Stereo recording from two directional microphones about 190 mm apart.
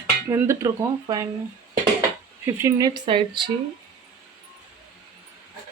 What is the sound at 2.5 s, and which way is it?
Speech, 15° right (ahead or behind).